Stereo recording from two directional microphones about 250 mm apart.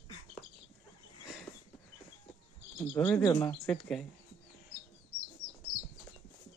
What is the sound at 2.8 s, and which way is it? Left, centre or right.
Speech, centre.